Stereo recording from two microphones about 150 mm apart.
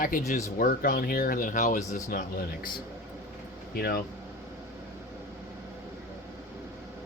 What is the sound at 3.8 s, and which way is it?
Speech, 90° left.